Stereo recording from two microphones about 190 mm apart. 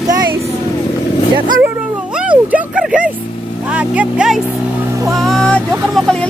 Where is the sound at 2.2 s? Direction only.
5° right (ahead or behind).